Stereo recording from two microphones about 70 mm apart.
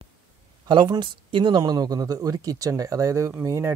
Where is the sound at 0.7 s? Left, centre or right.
Right.